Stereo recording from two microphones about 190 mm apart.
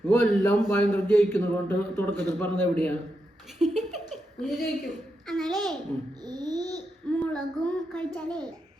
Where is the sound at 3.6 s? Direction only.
5° right (ahead or behind).